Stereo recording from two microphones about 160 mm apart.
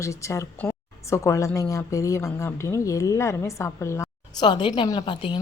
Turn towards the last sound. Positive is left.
turn(degrees=30)  # may be behind; listen again after turning